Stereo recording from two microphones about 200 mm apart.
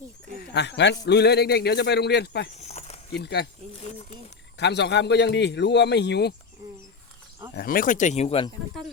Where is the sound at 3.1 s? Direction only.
55° left (ahead or behind).